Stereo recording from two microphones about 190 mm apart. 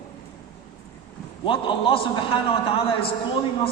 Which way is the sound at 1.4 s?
25° left (ahead or behind).